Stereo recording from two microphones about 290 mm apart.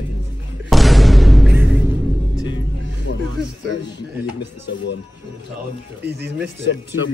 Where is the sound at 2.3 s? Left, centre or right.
Centre.